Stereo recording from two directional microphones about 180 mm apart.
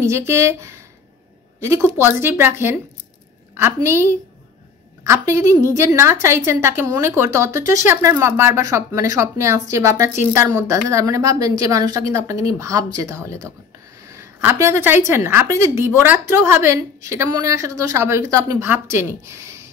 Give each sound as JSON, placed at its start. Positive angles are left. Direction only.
{"t": 0.0, "sound": "a woman's voice", "side_deg": -15}